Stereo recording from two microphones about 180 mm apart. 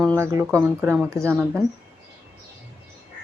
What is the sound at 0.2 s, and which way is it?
Speech, 15° right (ahead or behind).